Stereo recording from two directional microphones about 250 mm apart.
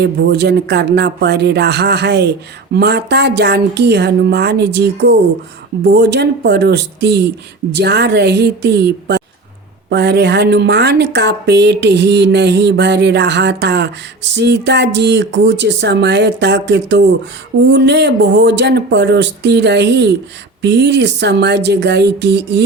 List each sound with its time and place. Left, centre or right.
0.0 s a woman's voice: right